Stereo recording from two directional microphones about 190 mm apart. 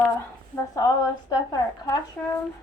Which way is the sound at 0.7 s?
20° left (ahead or behind).